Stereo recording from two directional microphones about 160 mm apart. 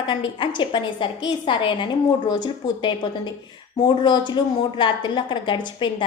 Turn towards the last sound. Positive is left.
turn(degrees=30)  # may be behind; listen again after turning